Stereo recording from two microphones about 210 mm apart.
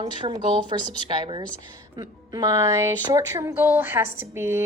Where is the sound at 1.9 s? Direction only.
15° right (ahead or behind).